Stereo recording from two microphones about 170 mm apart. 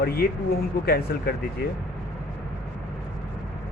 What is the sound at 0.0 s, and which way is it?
Speech, 70° left (ahead or behind).